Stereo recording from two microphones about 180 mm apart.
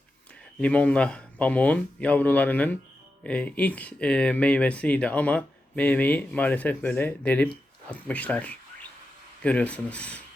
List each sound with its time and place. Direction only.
0.6 s speech: 5° left (ahead or behind)